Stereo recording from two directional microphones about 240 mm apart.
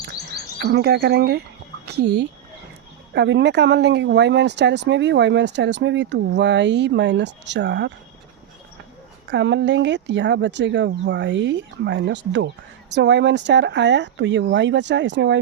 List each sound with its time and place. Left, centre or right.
0.3 s speech: right
9.3 s speech: right